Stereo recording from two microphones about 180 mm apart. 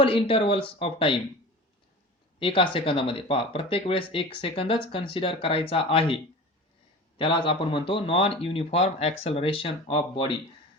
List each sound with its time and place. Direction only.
0.0 s speech: 30° left (ahead or behind)
2.4 s speech: 30° left (ahead or behind)
7.2 s speech: 30° left (ahead or behind)